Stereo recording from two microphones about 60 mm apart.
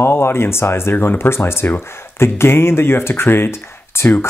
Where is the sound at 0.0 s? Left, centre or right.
Left.